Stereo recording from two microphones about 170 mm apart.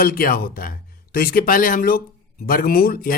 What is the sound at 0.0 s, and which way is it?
A man's voice, 60° left (ahead or behind).